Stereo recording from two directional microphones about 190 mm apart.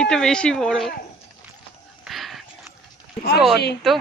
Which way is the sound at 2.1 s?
Centre (ahead or behind).